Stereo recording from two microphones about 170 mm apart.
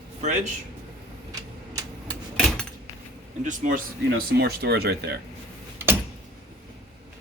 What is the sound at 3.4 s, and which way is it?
Speech, 50° right (ahead or behind).